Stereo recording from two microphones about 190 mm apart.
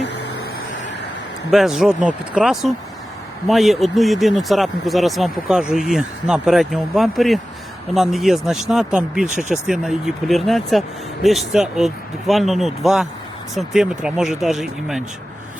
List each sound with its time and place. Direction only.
0.0 s vehicle: 60° left (ahead or behind)
1.5 s speech: centre (ahead or behind)
9.2 s speech: 40° right (ahead or behind)
9.6 s speech: centre (ahead or behind)